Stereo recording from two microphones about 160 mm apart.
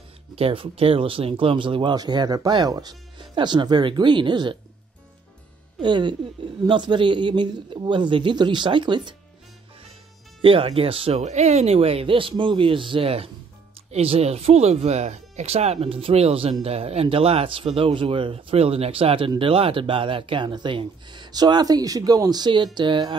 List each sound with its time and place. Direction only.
0.4 s speech: 35° right (ahead or behind)
5.8 s speech: 30° right (ahead or behind)
10.4 s speech: 35° right (ahead or behind)